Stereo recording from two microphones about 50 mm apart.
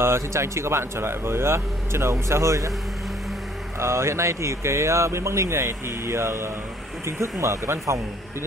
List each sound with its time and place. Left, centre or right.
0.0 s speech: right
3.8 s speech: right